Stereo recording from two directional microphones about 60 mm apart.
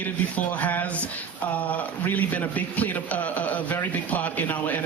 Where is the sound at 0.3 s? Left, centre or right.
Left.